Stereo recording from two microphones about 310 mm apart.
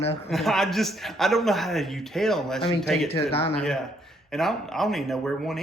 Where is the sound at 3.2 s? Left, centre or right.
Centre.